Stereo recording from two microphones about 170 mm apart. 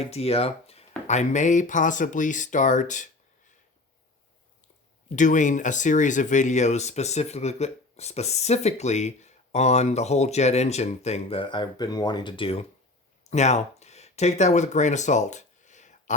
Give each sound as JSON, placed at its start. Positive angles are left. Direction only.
{"t": 0.0, "sound": "speech", "side_deg": 35}
{"t": 5.0, "sound": "speech", "side_deg": 45}